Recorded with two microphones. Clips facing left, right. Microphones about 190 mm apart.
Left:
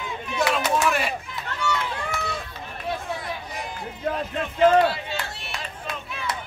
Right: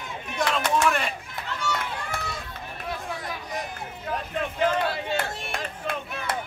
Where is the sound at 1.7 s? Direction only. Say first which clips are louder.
Left 4 dB; 55° right (ahead or behind).